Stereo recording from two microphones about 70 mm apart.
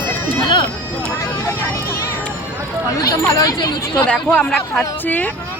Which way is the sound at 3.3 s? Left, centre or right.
Left.